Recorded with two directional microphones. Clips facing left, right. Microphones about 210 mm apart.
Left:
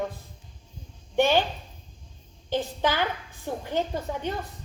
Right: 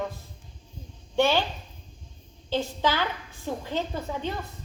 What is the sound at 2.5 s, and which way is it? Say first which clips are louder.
Speech: even; 15° left (ahead or behind).